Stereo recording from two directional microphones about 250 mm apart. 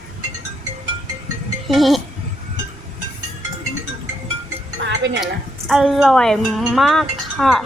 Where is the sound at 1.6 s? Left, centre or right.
Centre.